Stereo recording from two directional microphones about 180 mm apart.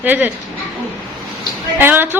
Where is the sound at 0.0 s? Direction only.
10° right (ahead or behind).